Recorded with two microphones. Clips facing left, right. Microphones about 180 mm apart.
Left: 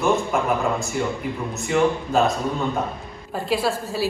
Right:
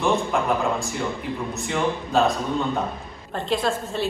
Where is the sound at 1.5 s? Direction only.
Centre (ahead or behind).